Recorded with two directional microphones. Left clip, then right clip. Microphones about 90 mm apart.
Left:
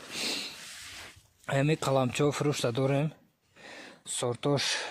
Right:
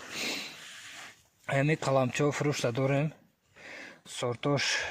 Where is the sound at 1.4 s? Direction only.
40° left (ahead or behind).